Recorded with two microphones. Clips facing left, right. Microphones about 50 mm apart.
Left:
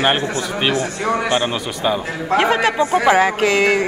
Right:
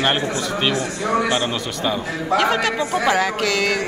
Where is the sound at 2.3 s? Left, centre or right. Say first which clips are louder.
Left 3 dB; left.